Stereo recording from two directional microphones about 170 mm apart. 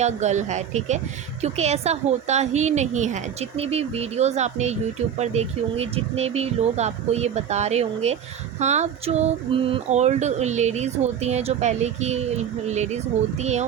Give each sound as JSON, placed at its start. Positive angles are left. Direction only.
{"t": 0.0, "sound": "speech", "side_deg": -45}
{"t": 1.4, "sound": "female singing", "side_deg": -40}